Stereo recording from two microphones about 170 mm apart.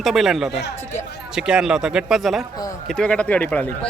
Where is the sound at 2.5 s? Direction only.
20° left (ahead or behind).